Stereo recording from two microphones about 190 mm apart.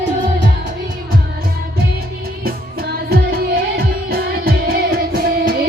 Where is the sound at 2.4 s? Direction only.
50° right (ahead or behind).